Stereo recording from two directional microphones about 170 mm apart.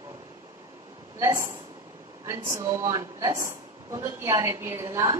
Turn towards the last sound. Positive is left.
turn(degrees=-20)  # may be behind; listen again after turning